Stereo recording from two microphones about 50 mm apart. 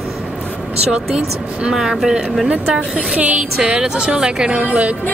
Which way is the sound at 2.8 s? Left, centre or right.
Centre.